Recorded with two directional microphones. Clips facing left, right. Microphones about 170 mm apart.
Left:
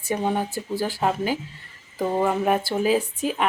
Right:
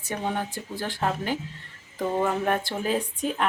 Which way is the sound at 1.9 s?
5° left (ahead or behind).